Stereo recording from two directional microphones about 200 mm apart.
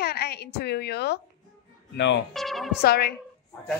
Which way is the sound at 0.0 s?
55° left (ahead or behind).